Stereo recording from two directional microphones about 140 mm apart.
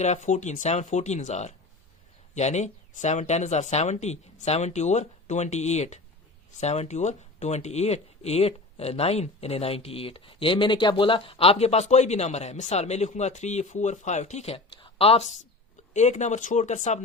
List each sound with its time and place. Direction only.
0.0 s speech: 55° left (ahead or behind)
15.9 s speech: 55° left (ahead or behind)